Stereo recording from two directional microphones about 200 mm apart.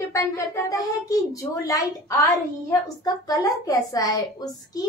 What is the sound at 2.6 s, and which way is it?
A woman's voice, 15° left (ahead or behind).